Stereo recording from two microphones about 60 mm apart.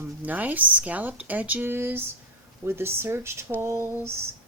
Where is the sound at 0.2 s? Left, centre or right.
Right.